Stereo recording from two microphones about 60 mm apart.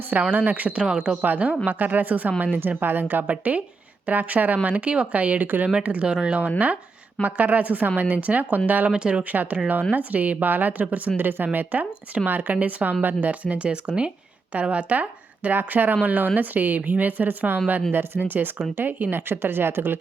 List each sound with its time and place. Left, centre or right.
0.2 s speech: right
0.9 s speech: centre
1.2 s speech: right
7.2 s speech: right
8.9 s speech: centre
9.3 s speech: right